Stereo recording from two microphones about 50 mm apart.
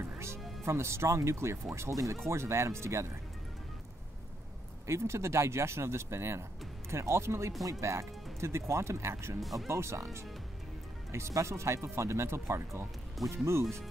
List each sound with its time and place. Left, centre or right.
0.0 s music: right
0.7 s speech: right
2.2 s speech: right
4.8 s speech: right
9.4 s speech: centre
9.7 s speech: right